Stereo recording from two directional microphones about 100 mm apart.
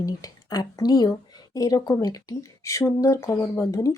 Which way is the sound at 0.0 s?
40° left (ahead or behind).